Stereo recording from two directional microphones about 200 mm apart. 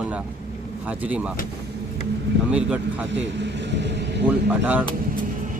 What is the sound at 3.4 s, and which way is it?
Vehicle, 60° right (ahead or behind).